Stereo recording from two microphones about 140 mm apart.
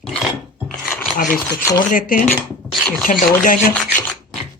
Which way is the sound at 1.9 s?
75° left (ahead or behind).